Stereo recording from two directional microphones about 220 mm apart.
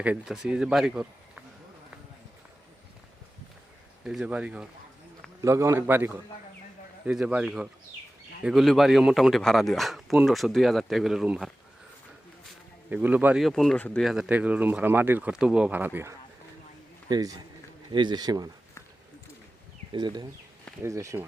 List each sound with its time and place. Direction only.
0.0 s a man's voice: 5° right (ahead or behind)
4.0 s a man's voice: 5° right (ahead or behind)
12.9 s speech: 5° right (ahead or behind)
19.9 s speech: 20° right (ahead or behind)